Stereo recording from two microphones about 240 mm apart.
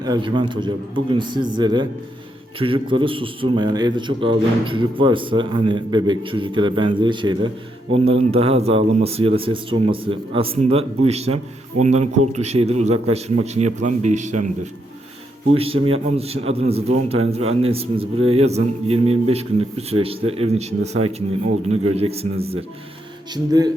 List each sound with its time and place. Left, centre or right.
0.0 s a man's voice: centre
15.5 s a man's voice: right